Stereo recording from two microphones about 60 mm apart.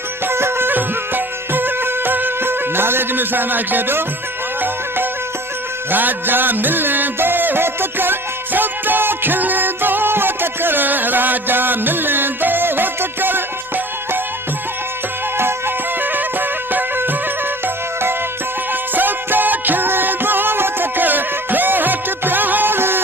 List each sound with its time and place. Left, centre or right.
0.3 s music: right
5.9 s music: right
15.4 s music: right
18.7 s music: right